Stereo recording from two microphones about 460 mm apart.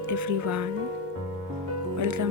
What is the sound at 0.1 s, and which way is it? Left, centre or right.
Speech, right.